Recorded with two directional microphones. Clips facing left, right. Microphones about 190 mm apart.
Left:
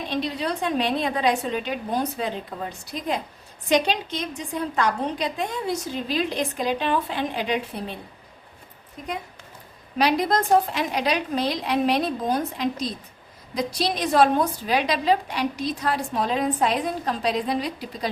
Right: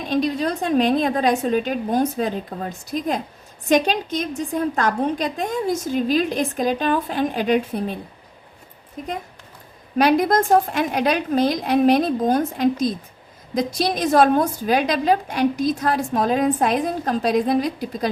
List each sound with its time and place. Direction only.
0.1 s a woman's voice: 45° right (ahead or behind)
10.0 s a woman's voice: 50° right (ahead or behind)